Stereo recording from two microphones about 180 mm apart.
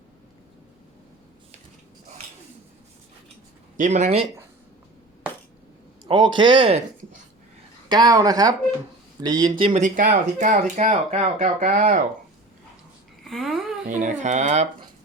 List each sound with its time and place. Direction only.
3.8 s speech: 45° right (ahead or behind)
6.1 s speech: 25° right (ahead or behind)
7.9 s speech: 20° right (ahead or behind)
9.8 s speech: 45° right (ahead or behind)
13.2 s a sound: centre (ahead or behind)
13.8 s speech: 45° right (ahead or behind)